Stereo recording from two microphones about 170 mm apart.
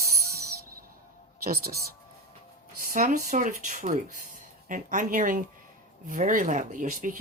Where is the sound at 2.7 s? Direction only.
50° right (ahead or behind).